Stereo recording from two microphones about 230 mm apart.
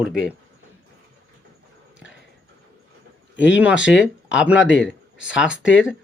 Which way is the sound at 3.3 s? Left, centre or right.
Left.